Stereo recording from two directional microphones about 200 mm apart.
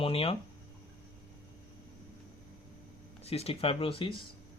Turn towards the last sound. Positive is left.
turn(degrees=25)  # may be behind; listen again after turning